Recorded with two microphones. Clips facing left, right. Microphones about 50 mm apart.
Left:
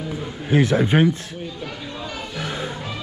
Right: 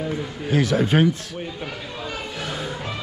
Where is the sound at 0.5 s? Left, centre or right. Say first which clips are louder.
Left 2 dB; left.